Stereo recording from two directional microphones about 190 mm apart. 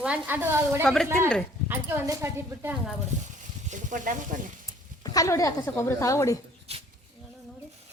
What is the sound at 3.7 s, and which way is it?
Speech, 40° right (ahead or behind).